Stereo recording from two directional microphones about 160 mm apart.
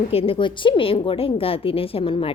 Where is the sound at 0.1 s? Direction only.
35° left (ahead or behind).